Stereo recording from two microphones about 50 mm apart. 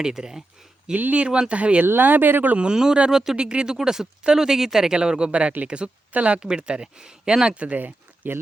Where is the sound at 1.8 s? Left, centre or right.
Right.